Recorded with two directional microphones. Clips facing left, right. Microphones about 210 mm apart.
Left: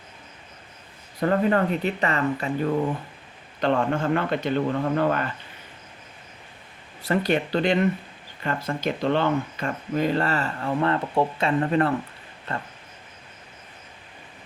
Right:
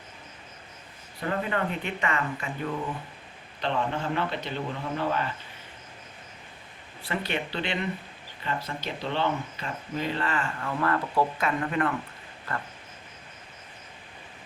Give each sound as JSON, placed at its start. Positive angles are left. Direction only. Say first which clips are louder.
{"t": 1.2, "sound": "speech", "louder": "left 8 dB", "side_deg": 40}
{"t": 3.6, "sound": "a man's voice", "louder": "left 6 dB", "side_deg": 50}
{"t": 7.1, "sound": "a man's voice", "louder": "left 9 dB", "side_deg": 45}